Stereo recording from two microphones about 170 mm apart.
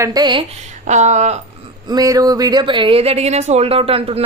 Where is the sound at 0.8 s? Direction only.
45° right (ahead or behind).